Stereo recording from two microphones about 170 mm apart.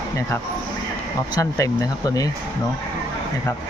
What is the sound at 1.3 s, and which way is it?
Speech, 20° left (ahead or behind).